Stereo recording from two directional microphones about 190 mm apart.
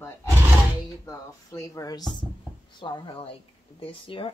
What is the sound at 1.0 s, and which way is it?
Speech, 15° left (ahead or behind).